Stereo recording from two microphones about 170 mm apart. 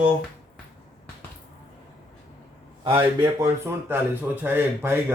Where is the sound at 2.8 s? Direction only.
20° right (ahead or behind).